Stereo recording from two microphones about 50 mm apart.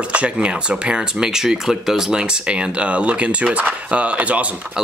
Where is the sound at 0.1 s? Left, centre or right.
Right.